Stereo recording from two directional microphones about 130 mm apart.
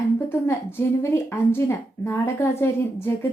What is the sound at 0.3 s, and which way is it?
A woman's voice, 20° left (ahead or behind).